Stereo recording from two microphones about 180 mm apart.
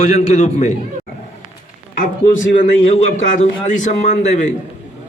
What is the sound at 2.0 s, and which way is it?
A man's voice, 45° left (ahead or behind).